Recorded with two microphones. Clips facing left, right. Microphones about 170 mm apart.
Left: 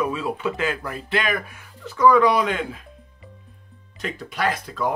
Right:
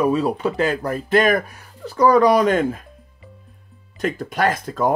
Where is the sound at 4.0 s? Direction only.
50° right (ahead or behind).